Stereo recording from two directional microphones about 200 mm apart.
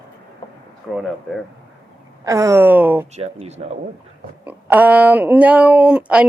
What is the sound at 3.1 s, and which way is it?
Speech, 30° right (ahead or behind).